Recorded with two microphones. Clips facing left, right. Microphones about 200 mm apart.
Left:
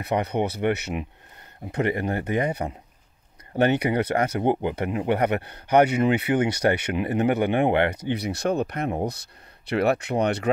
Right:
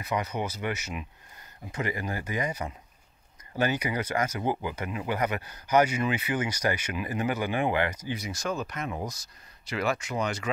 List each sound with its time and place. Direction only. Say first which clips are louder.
0.0 s speech: left 6 dB; 60° left (ahead or behind)